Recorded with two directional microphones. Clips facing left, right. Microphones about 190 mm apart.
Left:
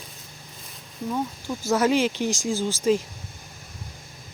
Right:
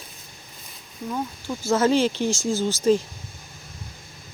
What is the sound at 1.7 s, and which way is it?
Speech, 15° left (ahead or behind).